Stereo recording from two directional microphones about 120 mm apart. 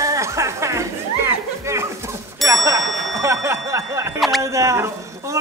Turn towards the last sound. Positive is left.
turn(degrees=-25)  # may be behind; listen again after turning